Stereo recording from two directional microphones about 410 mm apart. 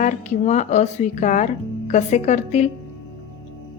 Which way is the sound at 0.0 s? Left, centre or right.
Centre.